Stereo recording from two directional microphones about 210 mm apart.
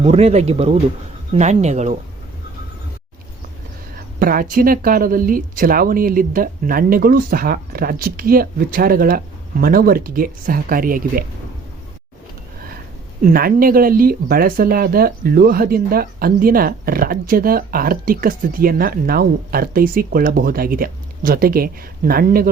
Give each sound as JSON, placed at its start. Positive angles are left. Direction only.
{"t": 0.0, "sound": "speech", "side_deg": -30}
{"t": 4.2, "sound": "speech", "side_deg": -45}
{"t": 13.2, "sound": "speech", "side_deg": -45}